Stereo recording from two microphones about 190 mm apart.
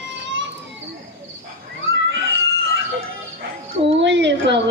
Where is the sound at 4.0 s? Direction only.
70° right (ahead or behind).